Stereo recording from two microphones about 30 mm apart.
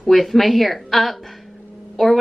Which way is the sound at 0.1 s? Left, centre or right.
Centre.